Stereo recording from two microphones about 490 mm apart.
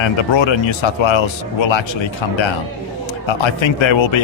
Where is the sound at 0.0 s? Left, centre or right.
Left.